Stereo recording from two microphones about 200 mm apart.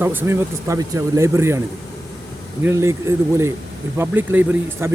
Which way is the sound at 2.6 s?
15° right (ahead or behind).